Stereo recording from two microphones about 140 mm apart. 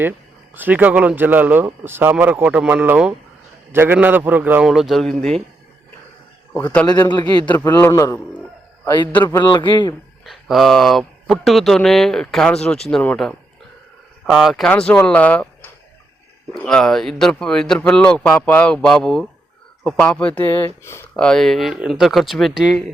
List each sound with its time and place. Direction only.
0.5 s speech: 15° right (ahead or behind); by 5.4 s 5° left (ahead or behind)
6.8 s a man's voice: 30° left (ahead or behind); by 9.4 s 15° left (ahead or behind)
9.4 s speech: 30° left (ahead or behind)
10.2 s a man's voice: centre (ahead or behind); by 21.1 s 20° left (ahead or behind)
21.2 s speech: 5° left (ahead or behind)